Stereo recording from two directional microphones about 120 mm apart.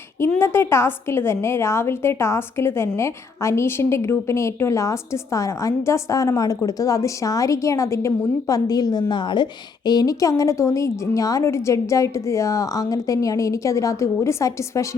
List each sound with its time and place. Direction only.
0.3 s a woman's voice: 20° left (ahead or behind)